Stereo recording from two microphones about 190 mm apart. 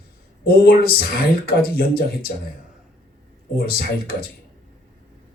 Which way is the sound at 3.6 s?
50° left (ahead or behind).